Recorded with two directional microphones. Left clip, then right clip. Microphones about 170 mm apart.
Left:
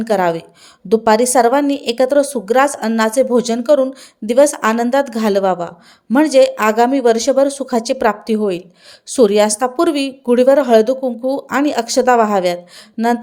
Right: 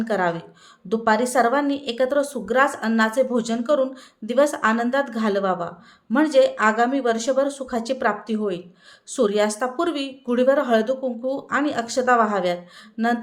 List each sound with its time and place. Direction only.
0.0 s speech: 45° left (ahead or behind)
13.0 s speech: 30° left (ahead or behind)